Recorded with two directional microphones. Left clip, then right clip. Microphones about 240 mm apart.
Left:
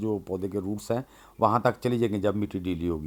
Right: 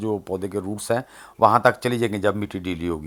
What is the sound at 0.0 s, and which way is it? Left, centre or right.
Speech, centre.